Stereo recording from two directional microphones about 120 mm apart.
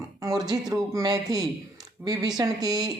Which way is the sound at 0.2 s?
30° right (ahead or behind).